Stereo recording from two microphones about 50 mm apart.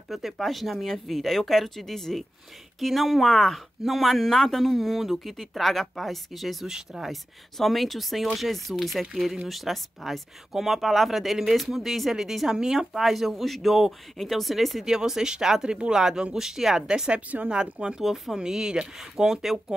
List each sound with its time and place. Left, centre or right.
0.1 s speech: centre
15.0 s speech: centre
18.0 s speech: centre